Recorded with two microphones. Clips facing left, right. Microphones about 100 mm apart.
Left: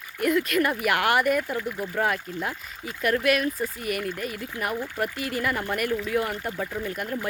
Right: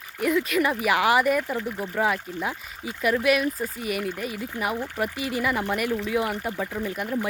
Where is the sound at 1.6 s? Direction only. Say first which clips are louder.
Even; 25° right (ahead or behind).